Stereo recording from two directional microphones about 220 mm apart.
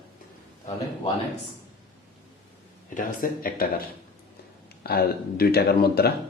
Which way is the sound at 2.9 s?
40° left (ahead or behind).